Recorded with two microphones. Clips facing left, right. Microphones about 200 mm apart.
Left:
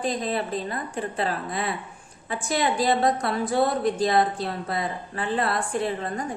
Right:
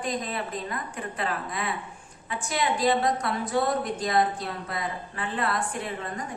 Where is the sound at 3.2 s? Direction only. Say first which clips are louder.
Left 3 dB; 30° left (ahead or behind).